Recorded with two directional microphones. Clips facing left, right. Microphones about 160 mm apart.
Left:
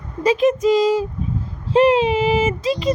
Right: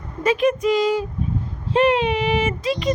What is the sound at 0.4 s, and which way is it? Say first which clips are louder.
Speech: left 2 dB; 20° left (ahead or behind).